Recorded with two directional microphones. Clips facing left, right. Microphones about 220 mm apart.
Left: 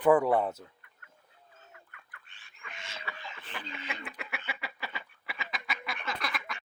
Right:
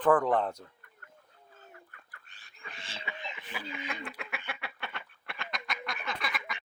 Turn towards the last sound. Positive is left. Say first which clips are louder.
# even
turn(degrees=0)  # may be behind; listen again after turning